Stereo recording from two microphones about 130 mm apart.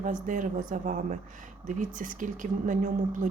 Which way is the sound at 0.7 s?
75° right (ahead or behind).